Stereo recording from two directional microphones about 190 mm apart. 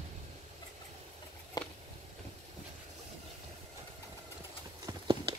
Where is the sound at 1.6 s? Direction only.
20° left (ahead or behind).